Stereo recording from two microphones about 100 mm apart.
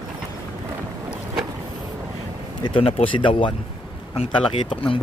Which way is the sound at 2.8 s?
70° left (ahead or behind).